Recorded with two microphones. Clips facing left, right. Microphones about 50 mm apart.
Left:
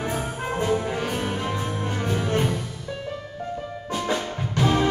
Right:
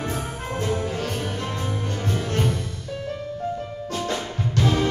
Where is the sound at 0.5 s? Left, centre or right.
Centre.